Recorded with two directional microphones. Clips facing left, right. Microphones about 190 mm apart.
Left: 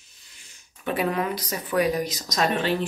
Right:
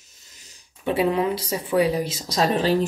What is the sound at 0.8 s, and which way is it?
Speech, 25° right (ahead or behind).